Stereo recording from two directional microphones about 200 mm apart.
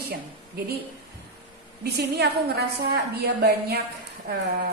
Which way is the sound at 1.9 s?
55° right (ahead or behind).